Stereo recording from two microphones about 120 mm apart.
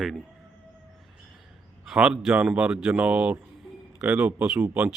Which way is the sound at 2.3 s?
15° right (ahead or behind).